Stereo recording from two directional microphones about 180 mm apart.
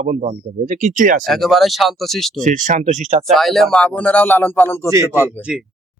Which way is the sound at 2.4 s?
45° right (ahead or behind).